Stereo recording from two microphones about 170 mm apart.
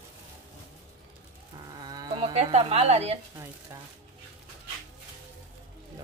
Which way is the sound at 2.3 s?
40° right (ahead or behind).